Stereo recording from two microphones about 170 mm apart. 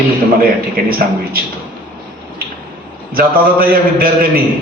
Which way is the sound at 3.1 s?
60° right (ahead or behind).